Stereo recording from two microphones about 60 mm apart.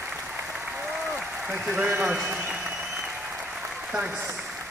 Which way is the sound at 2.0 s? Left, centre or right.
Centre.